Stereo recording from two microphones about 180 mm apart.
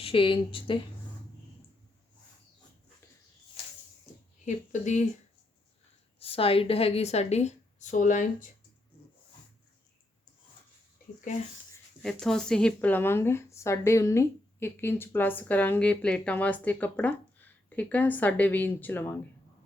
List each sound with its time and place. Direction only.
0.0 s speech: 30° left (ahead or behind)
4.4 s speech: 45° left (ahead or behind)
6.1 s a woman's voice: 30° left (ahead or behind)
12.0 s speech: 5° left (ahead or behind)